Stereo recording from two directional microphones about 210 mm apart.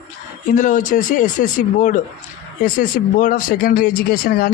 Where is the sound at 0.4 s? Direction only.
35° left (ahead or behind).